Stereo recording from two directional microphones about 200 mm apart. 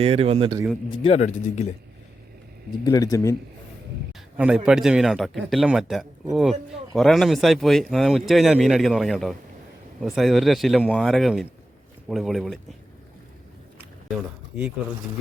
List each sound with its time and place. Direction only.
0.0 s speech: 30° right (ahead or behind)
1.0 s speech: 35° left (ahead or behind)
2.8 s speech: 20° left (ahead or behind)
4.4 s speech: 5° right (ahead or behind)
14.5 s speech: 5° right (ahead or behind)